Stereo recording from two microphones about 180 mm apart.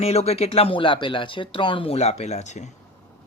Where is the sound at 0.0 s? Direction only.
35° left (ahead or behind).